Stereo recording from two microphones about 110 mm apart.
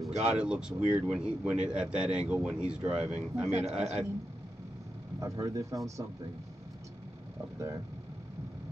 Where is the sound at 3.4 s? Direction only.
90° right.